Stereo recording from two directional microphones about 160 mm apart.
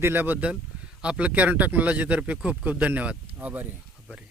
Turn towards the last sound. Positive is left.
turn(degrees=-10)  # may be behind; listen again after turning